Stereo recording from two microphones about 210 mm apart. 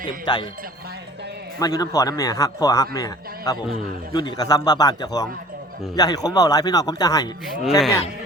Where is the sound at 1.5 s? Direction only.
15° left (ahead or behind).